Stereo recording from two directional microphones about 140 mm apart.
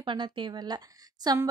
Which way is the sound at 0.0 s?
35° right (ahead or behind).